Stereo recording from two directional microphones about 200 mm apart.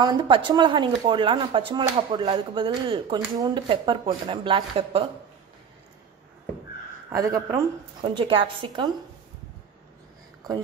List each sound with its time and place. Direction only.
0.0 s speech: 20° right (ahead or behind)
7.1 s speech: 15° right (ahead or behind)